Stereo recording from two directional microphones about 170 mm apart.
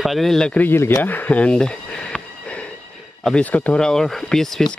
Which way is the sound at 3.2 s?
5° left (ahead or behind).